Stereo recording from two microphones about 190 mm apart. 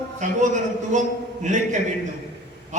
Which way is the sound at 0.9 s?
40° right (ahead or behind).